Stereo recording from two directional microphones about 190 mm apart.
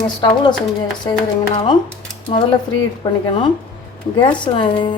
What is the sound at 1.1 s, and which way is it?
Music, 15° left (ahead or behind).